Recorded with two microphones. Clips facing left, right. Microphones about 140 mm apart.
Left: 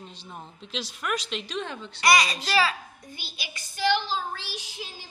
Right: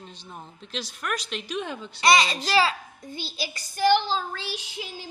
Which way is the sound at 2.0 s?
25° right (ahead or behind).